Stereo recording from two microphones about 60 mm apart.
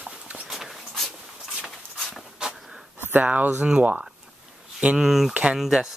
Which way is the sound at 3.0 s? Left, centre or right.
Right.